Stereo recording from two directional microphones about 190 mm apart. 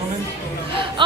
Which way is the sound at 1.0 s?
25° right (ahead or behind).